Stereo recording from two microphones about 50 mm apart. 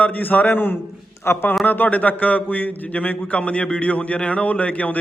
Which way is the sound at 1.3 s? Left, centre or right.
Left.